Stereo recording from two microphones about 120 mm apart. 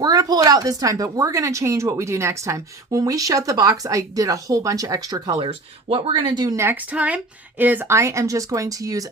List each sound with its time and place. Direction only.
0.0 s speech: 30° right (ahead or behind)
6.6 s a woman's voice: 15° right (ahead or behind)